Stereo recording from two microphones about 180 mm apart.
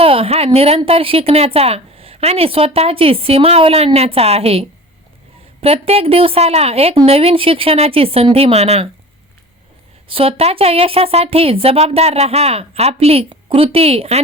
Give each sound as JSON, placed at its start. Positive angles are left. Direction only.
{"t": 0.0, "sound": "speech", "side_deg": -30}
{"t": 10.1, "sound": "speech", "side_deg": -30}